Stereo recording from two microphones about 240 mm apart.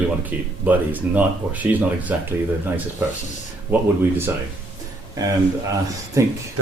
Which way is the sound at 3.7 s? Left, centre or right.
Centre.